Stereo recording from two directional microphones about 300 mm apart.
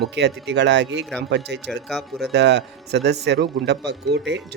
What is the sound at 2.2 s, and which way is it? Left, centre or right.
Speech, right.